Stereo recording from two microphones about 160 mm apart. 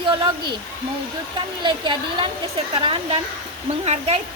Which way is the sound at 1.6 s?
30° right (ahead or behind).